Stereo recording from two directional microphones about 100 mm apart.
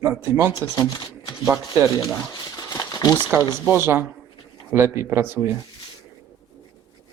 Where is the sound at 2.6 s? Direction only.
40° left (ahead or behind).